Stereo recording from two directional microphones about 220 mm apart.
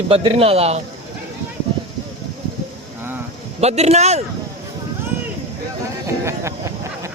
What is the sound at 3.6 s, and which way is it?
Speech, 30° right (ahead or behind).